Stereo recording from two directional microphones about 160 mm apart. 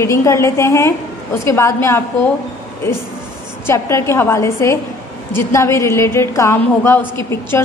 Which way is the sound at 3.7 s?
15° left (ahead or behind).